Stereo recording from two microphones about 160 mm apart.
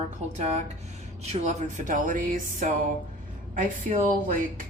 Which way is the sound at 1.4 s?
55° right (ahead or behind).